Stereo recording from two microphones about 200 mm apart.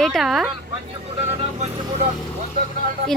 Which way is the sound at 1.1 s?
30° right (ahead or behind).